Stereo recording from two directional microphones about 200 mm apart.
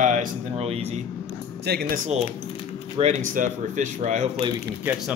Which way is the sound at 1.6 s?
55° right (ahead or behind).